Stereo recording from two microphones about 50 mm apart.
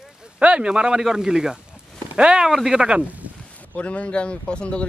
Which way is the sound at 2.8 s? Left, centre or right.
Centre.